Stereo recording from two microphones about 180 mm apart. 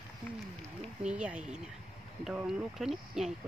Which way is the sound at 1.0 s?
5° right (ahead or behind).